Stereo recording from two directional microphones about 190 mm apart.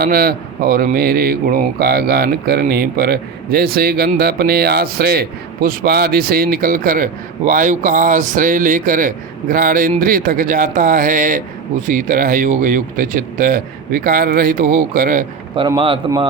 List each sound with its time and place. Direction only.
0.0 s speech: 50° right (ahead or behind)
15.5 s a man's voice: 25° right (ahead or behind)